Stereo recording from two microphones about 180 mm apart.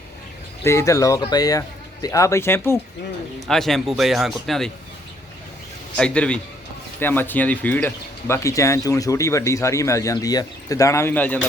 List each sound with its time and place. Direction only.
0.6 s speech: 15° left (ahead or behind)
3.4 s speech: centre (ahead or behind)
6.0 s speech: 5° left (ahead or behind)